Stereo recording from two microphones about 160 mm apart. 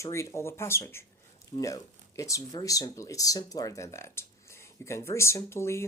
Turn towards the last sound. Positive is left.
turn(degrees=15)  # may be behind; listen again after turning